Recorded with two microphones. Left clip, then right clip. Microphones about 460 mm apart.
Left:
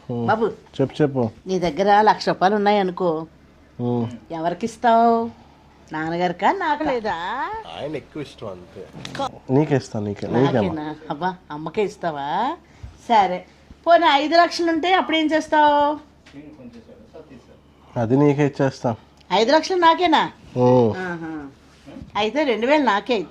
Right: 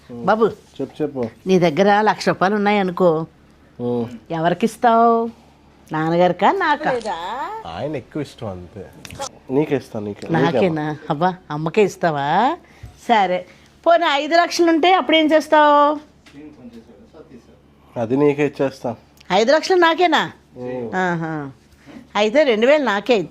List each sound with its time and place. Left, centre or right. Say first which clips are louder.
0.3 s speech: right 4 dB; right
0.8 s speech: left 5 dB; centre
1.5 s a woman's voice: right 4 dB; right
3.8 s speech: right 2 dB; centre
4.3 s a woman's voice: right 7 dB; right
6.9 s a woman's voice: even; left
7.6 s speech: right 3 dB; right
9.5 s speech: right 1 dB; centre
10.6 s a woman's voice: right 5 dB; right
13.1 s a woman's voice: right 1 dB; right
17.9 s speech: right 1 dB; centre
19.3 s a woman's voice: right 2 dB; right
22.1 s a woman's voice: right 5 dB; right